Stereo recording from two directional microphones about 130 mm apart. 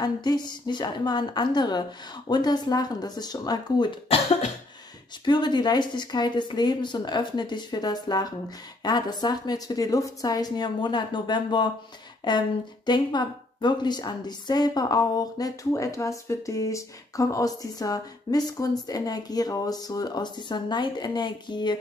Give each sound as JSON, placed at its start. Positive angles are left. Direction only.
{"t": 0.0, "sound": "a woman's voice", "side_deg": 30}
{"t": 5.2, "sound": "a woman's voice", "side_deg": 35}